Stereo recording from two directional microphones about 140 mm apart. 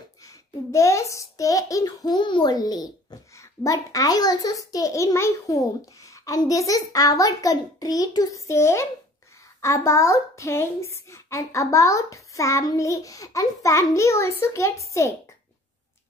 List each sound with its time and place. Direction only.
0.7 s a woman's voice: 20° left (ahead or behind)